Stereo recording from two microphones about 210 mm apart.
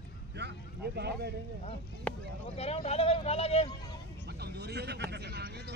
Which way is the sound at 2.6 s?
30° left (ahead or behind).